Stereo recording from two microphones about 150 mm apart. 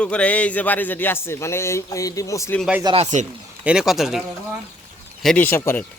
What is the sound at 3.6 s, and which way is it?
Speech, 5° right (ahead or behind).